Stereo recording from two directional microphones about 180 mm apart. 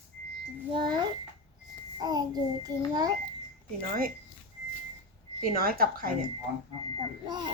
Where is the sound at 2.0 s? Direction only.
20° right (ahead or behind).